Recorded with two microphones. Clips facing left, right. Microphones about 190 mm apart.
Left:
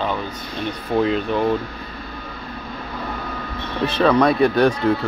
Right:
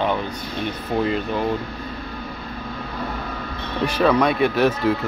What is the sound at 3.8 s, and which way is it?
Speech, 10° right (ahead or behind).